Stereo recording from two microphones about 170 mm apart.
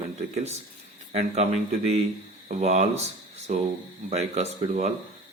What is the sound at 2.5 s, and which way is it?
Speech, 40° right (ahead or behind).